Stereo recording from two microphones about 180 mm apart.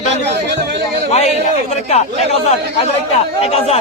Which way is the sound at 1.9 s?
35° left (ahead or behind).